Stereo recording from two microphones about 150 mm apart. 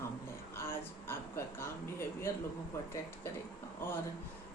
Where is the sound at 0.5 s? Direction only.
15° left (ahead or behind).